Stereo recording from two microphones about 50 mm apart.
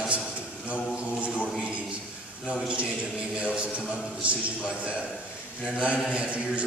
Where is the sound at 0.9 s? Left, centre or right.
Right.